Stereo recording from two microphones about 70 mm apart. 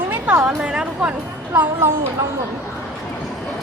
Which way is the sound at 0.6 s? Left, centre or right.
Centre.